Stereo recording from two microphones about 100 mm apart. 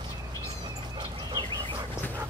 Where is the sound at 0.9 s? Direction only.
45° right (ahead or behind).